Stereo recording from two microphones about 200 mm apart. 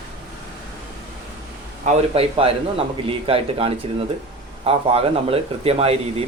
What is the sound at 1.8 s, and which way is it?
Speech, 30° right (ahead or behind).